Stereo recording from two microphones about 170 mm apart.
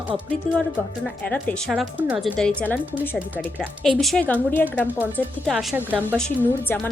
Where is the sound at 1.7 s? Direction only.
10° right (ahead or behind); by 2.7 s 10° left (ahead or behind).